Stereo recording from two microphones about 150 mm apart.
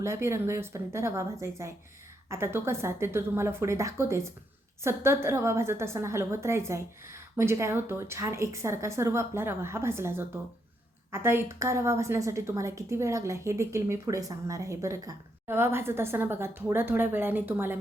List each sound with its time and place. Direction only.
0.0 s a woman's voice: 20° right (ahead or behind)